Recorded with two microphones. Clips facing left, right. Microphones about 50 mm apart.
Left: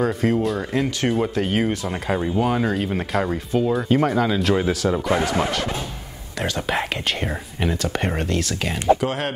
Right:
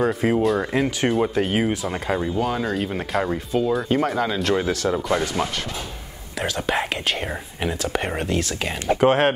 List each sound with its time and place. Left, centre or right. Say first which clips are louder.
0.0 s speech: right 1 dB; centre
2.2 s speech: left 2 dB; centre
6.4 s speech: even; centre
9.0 s speech: right 7 dB; right